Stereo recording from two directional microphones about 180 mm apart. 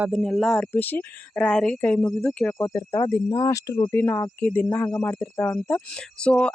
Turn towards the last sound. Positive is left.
turn(degrees=5)  # may be behind; listen again after turning